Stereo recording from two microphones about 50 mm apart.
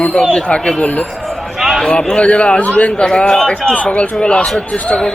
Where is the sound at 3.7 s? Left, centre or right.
Left.